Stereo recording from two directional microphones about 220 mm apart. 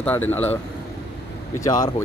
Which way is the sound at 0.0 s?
10° left (ahead or behind).